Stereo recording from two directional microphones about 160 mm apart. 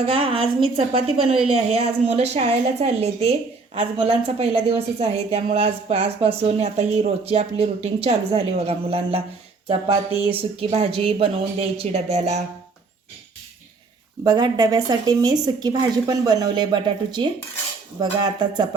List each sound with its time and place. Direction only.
0.0 s a woman's voice: 35° right (ahead or behind)
14.3 s a woman's voice: 25° right (ahead or behind)